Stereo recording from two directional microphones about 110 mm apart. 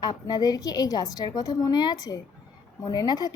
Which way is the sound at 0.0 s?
40° left (ahead or behind).